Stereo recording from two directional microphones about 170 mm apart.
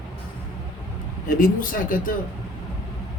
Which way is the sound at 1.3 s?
55° left (ahead or behind).